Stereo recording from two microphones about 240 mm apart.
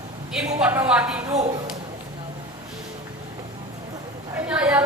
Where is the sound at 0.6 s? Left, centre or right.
Centre.